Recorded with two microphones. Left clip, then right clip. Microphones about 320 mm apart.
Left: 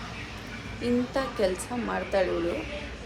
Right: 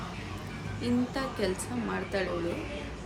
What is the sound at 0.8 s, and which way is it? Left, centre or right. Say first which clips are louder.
A woman's voice: left 4 dB; centre.